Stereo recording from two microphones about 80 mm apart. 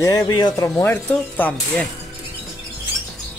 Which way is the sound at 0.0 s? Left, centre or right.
Left.